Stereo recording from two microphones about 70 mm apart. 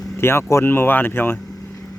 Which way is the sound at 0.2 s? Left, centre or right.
Left.